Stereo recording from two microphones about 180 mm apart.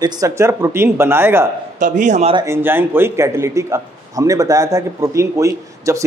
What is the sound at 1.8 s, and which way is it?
Speech, 45° right (ahead or behind).